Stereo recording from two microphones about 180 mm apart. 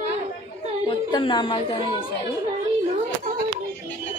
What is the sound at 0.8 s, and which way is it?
Speech, 30° left (ahead or behind).